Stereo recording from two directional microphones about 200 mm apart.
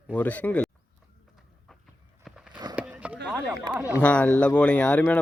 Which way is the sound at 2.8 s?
5° right (ahead or behind).